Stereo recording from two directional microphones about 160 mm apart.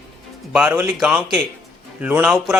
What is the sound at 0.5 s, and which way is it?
A man's voice, 5° right (ahead or behind).